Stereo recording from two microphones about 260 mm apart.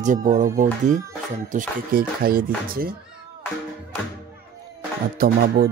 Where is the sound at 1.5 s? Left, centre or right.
Right.